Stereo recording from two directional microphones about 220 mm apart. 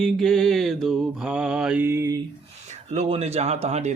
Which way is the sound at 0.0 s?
Centre (ahead or behind).